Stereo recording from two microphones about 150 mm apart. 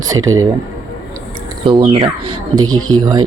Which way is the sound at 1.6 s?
25° right (ahead or behind).